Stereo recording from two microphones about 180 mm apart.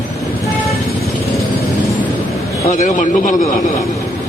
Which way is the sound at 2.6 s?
45° left (ahead or behind).